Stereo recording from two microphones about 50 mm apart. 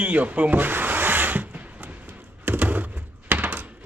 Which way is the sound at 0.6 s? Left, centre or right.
Right.